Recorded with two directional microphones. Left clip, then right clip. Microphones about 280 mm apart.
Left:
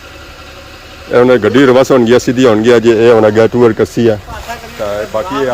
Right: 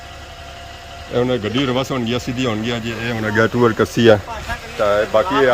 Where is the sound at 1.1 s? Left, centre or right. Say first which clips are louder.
Left 12 dB; centre.